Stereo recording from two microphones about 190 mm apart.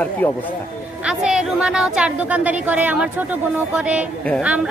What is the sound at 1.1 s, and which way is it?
A woman's voice, 5° right (ahead or behind).